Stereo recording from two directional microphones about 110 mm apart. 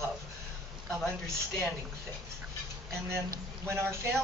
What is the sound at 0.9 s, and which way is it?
Speech, 5° left (ahead or behind).